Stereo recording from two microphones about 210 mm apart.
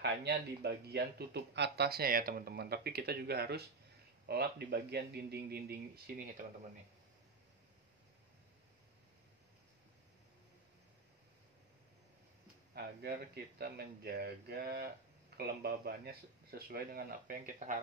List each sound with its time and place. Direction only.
0.0 s speech: 50° right (ahead or behind)
12.7 s speech: 50° right (ahead or behind)